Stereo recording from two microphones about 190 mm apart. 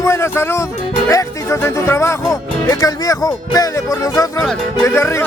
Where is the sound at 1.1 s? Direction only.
15° left (ahead or behind).